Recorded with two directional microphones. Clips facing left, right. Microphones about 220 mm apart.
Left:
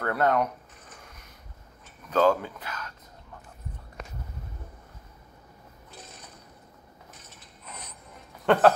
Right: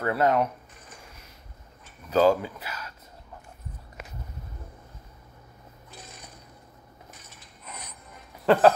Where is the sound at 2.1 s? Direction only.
10° right (ahead or behind).